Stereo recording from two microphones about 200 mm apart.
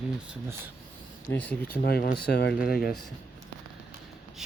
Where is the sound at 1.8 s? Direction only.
45° left (ahead or behind).